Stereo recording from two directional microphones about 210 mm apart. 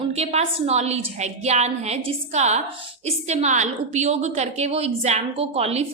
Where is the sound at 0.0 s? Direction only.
30° right (ahead or behind).